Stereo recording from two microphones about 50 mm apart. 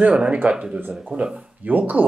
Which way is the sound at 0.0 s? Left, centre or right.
Right.